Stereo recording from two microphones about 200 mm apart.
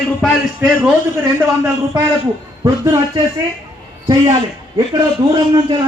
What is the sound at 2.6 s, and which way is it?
Speech, 20° right (ahead or behind).